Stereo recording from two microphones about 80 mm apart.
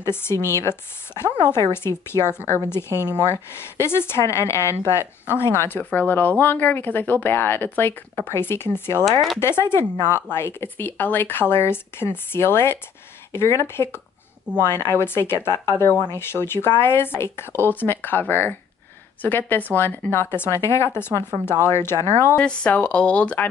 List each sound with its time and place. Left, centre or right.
0.0 s speech: left
21.1 s speech: right
21.5 s speech: left
22.4 s speech: centre